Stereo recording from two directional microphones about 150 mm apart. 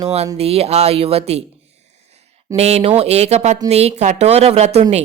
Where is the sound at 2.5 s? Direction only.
45° right (ahead or behind).